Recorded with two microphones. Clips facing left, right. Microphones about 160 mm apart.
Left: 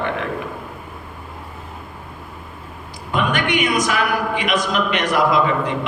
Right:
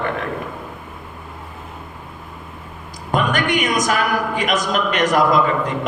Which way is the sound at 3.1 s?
45° right (ahead or behind).